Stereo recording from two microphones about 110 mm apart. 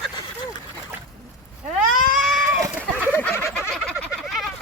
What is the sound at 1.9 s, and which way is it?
Goat, centre (ahead or behind).